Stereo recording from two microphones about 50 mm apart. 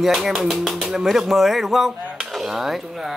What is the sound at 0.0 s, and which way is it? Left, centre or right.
Speech, centre.